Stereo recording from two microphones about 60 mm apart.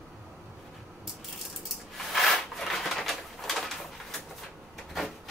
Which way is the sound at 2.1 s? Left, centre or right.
Centre.